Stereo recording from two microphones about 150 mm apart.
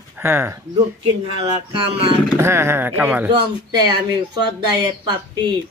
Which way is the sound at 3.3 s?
30° right (ahead or behind).